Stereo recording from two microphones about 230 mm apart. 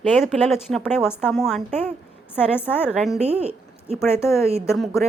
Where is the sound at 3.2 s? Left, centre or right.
Right.